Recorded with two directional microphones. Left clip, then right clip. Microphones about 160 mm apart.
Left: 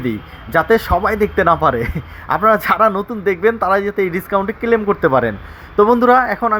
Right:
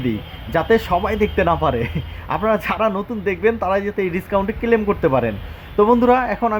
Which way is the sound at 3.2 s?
10° left (ahead or behind).